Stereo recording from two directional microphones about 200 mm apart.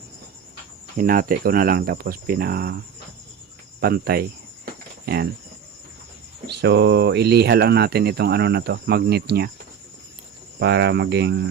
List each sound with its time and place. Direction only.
0.9 s speech: 45° right (ahead or behind)
3.8 s cricket: 50° right (ahead or behind)
6.5 s speech: 60° right (ahead or behind)
10.6 s speech: 55° right (ahead or behind)